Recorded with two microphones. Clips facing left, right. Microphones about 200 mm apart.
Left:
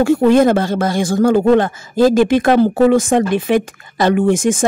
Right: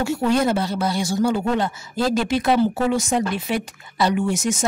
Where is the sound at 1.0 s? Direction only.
50° left (ahead or behind).